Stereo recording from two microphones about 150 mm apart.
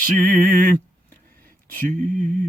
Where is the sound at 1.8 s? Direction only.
60° right (ahead or behind).